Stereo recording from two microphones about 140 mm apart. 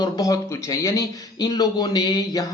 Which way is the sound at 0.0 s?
25° left (ahead or behind).